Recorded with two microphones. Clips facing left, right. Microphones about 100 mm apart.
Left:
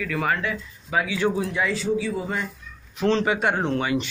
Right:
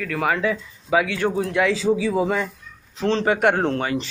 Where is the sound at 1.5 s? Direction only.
90° right.